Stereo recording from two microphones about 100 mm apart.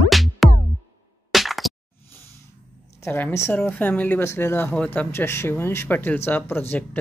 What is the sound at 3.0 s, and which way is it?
A woman's voice, 20° left (ahead or behind).